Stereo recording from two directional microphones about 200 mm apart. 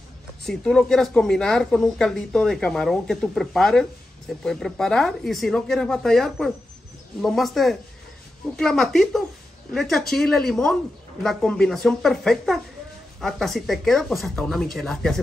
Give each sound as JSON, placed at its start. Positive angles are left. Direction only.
{"t": 0.5, "sound": "speech", "side_deg": 0}